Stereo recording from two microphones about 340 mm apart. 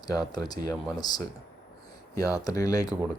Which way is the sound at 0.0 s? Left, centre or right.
Centre.